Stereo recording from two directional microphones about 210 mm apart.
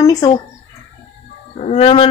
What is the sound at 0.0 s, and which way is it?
Speech, 15° left (ahead or behind).